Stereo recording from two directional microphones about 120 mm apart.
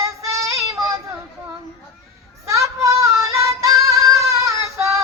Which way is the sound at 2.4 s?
25° right (ahead or behind).